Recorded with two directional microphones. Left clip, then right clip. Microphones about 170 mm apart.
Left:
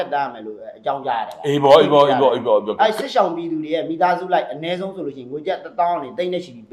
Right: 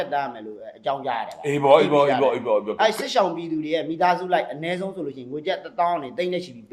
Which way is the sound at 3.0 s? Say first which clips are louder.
Left 3 dB; 35° right (ahead or behind).